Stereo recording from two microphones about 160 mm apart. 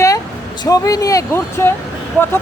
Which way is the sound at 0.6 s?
25° left (ahead or behind).